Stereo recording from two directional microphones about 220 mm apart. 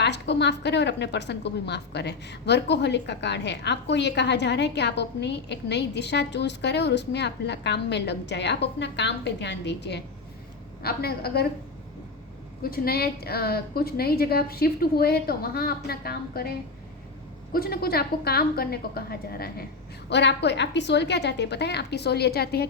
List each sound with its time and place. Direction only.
0.0 s a woman's voice: 50° left (ahead or behind)
12.7 s a woman's voice: 45° left (ahead or behind)